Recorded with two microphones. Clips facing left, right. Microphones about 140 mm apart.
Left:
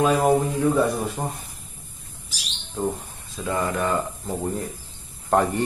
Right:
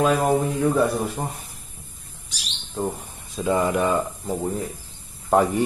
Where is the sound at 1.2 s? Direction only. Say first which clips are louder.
Even; 5° left (ahead or behind).